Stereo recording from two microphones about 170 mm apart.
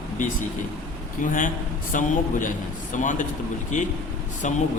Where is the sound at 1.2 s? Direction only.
50° left (ahead or behind).